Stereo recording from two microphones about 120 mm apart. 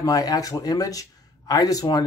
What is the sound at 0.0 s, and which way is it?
Speech, 30° left (ahead or behind).